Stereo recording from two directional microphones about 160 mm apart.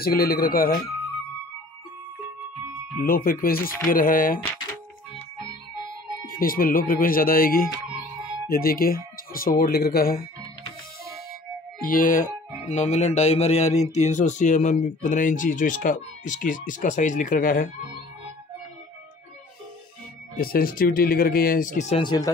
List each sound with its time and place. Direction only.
0.0 s speech: 70° left (ahead or behind)
3.0 s speech: 65° left (ahead or behind)
6.2 s speech: 60° left (ahead or behind)
11.8 s speech: 60° left (ahead or behind)
20.3 s speech: 65° left (ahead or behind)
21.9 s speech: 25° left (ahead or behind)